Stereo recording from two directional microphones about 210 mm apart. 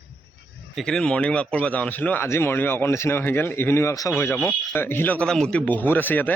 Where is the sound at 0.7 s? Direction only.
5° left (ahead or behind).